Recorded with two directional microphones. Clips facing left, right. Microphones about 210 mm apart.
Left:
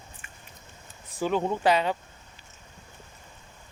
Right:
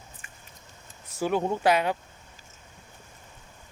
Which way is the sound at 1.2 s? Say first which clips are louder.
Even; 10° right (ahead or behind).